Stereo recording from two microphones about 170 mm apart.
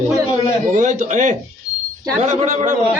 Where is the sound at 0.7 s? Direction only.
45° right (ahead or behind).